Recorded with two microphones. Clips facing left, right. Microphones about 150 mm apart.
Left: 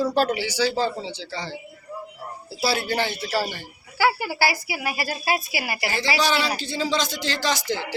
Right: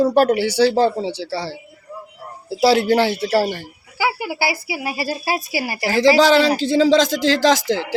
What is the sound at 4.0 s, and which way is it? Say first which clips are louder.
A woman's voice: even; 10° right (ahead or behind).